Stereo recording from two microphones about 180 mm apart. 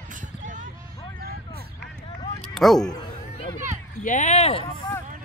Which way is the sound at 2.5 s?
Centre (ahead or behind).